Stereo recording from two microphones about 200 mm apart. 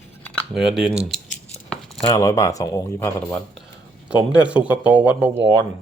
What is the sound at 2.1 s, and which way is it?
Speech, 15° left (ahead or behind).